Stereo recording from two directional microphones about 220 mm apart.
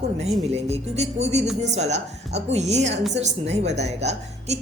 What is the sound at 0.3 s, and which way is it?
A woman's voice, 30° right (ahead or behind).